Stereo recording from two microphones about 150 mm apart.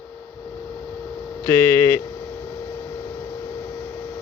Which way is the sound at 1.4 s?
15° left (ahead or behind).